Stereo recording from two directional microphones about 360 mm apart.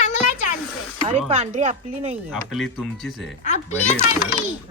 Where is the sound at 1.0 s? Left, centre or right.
Centre.